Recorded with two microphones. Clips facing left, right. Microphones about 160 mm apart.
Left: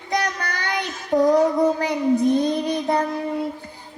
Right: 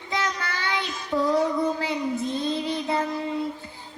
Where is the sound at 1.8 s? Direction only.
15° left (ahead or behind).